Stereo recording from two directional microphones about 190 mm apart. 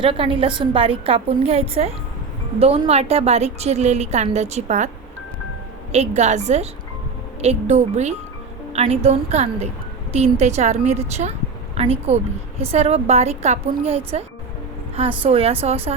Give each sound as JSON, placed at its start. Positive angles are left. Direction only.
{"t": 0.0, "sound": "a woman's voice", "side_deg": -30}
{"t": 5.9, "sound": "a woman's voice", "side_deg": -35}